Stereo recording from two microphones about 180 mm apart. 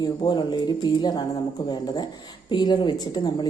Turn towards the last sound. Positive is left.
turn(degrees=25)  # may be behind; listen again after turning